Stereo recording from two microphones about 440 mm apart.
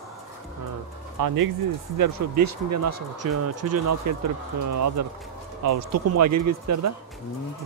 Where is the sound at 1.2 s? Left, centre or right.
Right.